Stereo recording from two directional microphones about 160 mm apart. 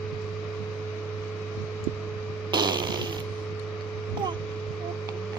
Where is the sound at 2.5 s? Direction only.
25° right (ahead or behind).